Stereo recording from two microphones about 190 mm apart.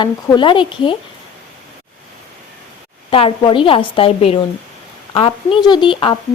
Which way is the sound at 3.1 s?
30° left (ahead or behind).